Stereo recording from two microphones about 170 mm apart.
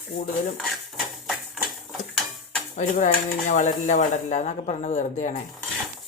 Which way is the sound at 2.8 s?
45° left (ahead or behind).